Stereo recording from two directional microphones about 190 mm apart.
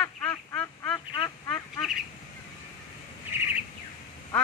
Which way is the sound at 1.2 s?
20° left (ahead or behind).